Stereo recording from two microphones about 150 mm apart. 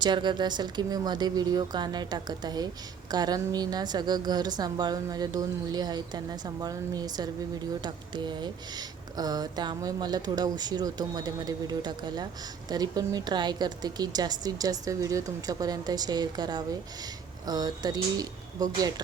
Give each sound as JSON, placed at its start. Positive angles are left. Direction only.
{"t": 0.0, "sound": "a woman's voice", "side_deg": -30}